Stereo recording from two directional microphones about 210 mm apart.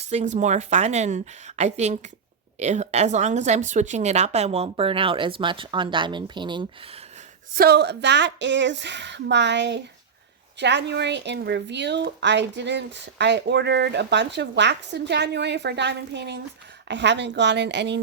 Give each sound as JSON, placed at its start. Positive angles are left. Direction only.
{"t": 0.1, "sound": "a woman's voice", "side_deg": -30}
{"t": 7.5, "sound": "a woman's voice", "side_deg": -45}